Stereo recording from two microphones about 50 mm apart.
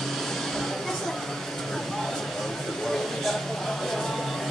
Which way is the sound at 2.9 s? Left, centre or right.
Centre.